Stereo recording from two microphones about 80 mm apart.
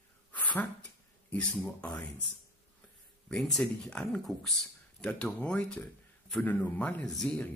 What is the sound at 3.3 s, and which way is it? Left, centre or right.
Speech, centre.